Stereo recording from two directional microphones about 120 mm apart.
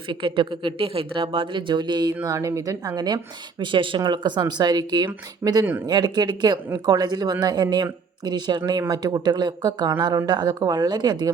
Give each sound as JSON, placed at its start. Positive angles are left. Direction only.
{"t": 0.1, "sound": "speech", "side_deg": -45}